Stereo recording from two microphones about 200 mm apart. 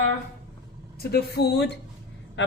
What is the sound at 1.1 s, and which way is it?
Speech, 55° left (ahead or behind).